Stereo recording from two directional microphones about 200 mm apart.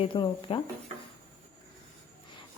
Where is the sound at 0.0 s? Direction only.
25° left (ahead or behind).